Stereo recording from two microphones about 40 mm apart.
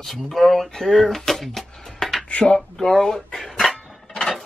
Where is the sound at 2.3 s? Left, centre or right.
Left.